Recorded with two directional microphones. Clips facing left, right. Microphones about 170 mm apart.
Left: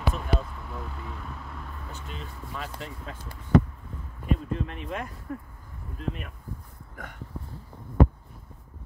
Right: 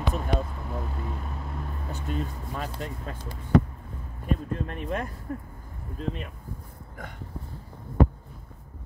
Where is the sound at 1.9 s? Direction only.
45° right (ahead or behind).